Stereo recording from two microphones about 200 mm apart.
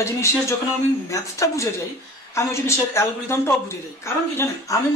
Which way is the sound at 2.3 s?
15° left (ahead or behind).